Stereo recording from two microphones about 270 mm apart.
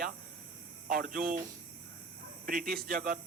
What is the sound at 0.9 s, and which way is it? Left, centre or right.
Speech, right.